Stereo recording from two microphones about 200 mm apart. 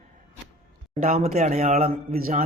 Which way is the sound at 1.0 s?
35° right (ahead or behind).